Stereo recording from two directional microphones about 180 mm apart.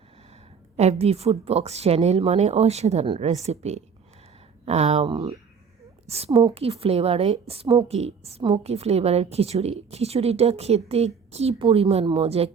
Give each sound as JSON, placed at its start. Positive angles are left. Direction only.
{"t": 0.8, "sound": "a woman's voice", "side_deg": -35}
{"t": 5.0, "sound": "speech", "side_deg": -20}
{"t": 6.1, "sound": "a woman's voice", "side_deg": -35}